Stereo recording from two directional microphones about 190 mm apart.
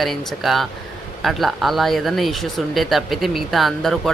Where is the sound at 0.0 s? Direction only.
Centre (ahead or behind).